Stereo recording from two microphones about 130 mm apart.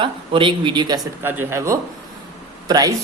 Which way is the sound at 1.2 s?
15° right (ahead or behind).